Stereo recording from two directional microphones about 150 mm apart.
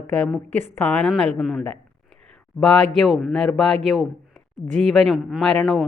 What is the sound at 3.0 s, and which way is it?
Speech, centre (ahead or behind).